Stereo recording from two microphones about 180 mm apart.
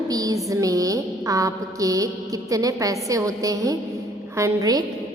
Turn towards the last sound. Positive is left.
turn(degrees=-20)  # may be behind; listen again after turning